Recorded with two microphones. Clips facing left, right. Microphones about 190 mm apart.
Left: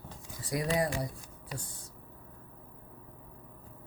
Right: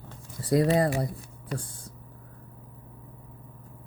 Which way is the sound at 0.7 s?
60° right (ahead or behind).